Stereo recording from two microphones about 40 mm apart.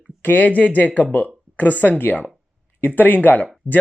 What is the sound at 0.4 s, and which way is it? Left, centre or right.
Speech, left.